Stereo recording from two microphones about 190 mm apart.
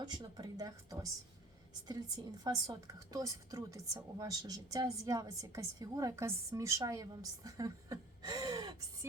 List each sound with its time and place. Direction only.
0.0 s a woman's voice: 20° right (ahead or behind)